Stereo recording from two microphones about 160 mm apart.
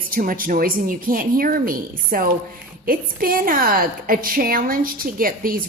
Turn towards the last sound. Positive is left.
turn(degrees=-60)  # may be behind; listen again after turning